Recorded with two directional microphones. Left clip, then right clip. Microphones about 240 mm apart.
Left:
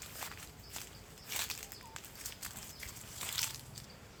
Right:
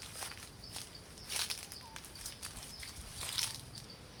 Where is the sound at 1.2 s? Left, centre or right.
Centre.